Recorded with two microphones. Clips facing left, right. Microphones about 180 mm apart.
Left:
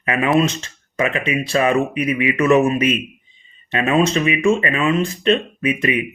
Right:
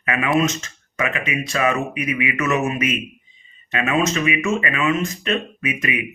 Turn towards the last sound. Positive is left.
turn(degrees=30)  # may be behind; listen again after turning